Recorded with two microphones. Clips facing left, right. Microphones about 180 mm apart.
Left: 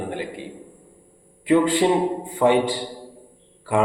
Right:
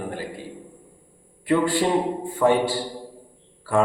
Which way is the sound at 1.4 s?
20° left (ahead or behind).